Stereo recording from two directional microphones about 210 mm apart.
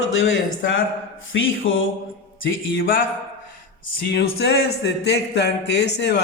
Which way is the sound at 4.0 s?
50° left (ahead or behind).